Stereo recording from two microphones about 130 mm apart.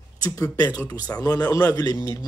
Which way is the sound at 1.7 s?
30° left (ahead or behind).